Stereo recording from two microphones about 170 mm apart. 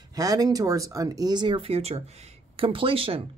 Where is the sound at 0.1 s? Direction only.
20° right (ahead or behind).